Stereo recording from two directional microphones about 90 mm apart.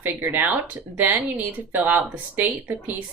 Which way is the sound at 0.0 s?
20° right (ahead or behind).